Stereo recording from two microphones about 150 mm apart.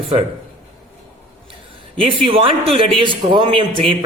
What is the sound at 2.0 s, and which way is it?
Speech, 35° right (ahead or behind).